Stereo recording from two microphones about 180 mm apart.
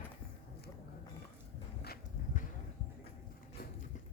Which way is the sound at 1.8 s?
55° left (ahead or behind).